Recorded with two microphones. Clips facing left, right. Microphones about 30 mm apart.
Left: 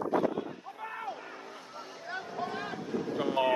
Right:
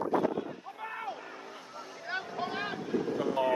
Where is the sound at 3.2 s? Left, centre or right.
Left.